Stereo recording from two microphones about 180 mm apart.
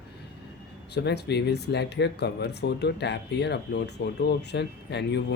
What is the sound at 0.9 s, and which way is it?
Speech, 70° left (ahead or behind).